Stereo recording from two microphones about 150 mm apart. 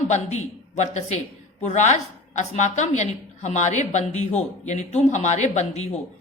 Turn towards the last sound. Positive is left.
turn(degrees=50)  # may be behind; listen again after turning